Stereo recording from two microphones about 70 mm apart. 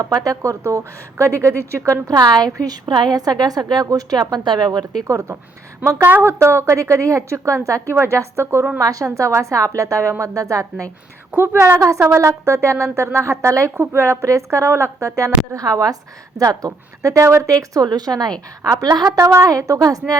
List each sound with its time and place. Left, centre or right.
0.0 s speech: right
1.2 s speech: right
2.1 s a woman's voice: right
5.0 s a woman's voice: right
8.8 s speech: right
11.3 s a woman's voice: right
13.7 s a woman's voice: right
19.1 s speech: right